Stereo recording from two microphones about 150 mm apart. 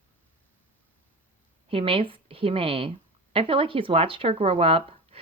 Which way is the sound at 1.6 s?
40° right (ahead or behind).